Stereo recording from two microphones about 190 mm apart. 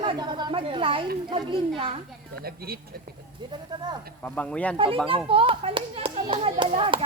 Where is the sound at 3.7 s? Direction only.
25° right (ahead or behind).